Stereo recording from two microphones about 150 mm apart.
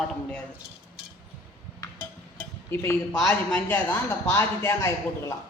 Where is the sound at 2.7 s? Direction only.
15° left (ahead or behind).